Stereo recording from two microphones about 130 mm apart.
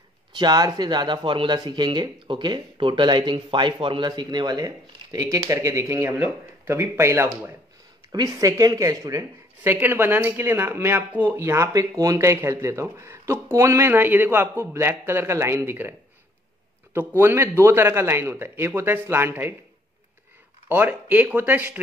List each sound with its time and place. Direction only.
0.4 s speech: 30° right (ahead or behind)
17.2 s speech: 20° right (ahead or behind)
20.6 s speech: 15° right (ahead or behind)